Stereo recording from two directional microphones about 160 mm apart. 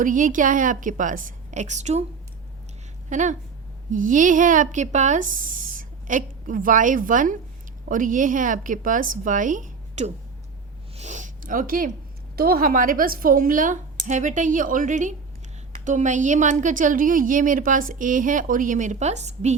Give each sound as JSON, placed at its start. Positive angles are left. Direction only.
{"t": 0.0, "sound": "speech", "side_deg": -55}
{"t": 3.1, "sound": "a woman's voice", "side_deg": -50}
{"t": 10.9, "sound": "a sound", "side_deg": -50}
{"t": 12.4, "sound": "a woman's voice", "side_deg": -70}